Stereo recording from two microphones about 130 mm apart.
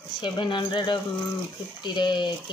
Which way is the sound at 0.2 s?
35° left (ahead or behind).